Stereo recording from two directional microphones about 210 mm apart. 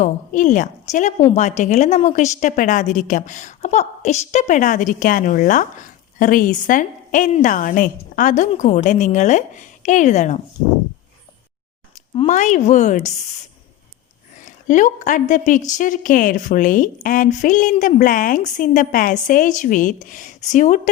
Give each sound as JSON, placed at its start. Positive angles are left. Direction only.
{"t": 0.0, "sound": "a woman's voice", "side_deg": 35}
{"t": 12.1, "sound": "a woman's voice", "side_deg": 30}
{"t": 14.3, "sound": "a woman's voice", "side_deg": 35}